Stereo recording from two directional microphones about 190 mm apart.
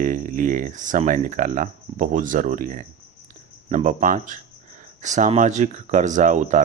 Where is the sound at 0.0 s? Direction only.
45° right (ahead or behind).